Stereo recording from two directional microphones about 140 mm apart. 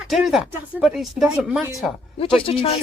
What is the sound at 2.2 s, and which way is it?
Speech, 40° left (ahead or behind).